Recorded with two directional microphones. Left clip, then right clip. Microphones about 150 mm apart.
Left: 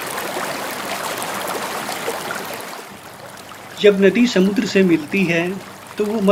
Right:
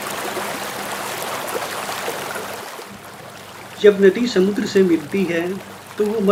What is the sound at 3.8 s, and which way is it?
Speech, 45° left (ahead or behind).